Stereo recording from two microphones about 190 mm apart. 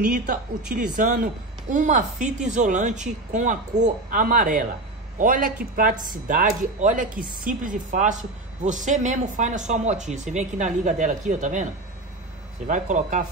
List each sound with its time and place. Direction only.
0.9 s a woman's voice: 40° right (ahead or behind)
12.6 s a woman's voice: 40° right (ahead or behind)